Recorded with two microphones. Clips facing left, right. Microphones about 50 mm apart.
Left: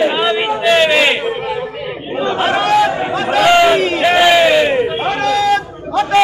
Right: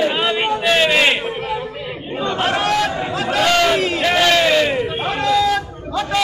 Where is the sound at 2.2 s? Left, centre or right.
Centre.